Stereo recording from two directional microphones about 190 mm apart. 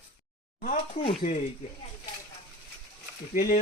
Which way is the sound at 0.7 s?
35° left (ahead or behind).